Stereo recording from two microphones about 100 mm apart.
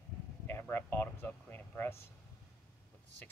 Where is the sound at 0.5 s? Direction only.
20° left (ahead or behind).